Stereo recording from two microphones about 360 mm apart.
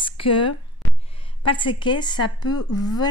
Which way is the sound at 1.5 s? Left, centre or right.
Centre.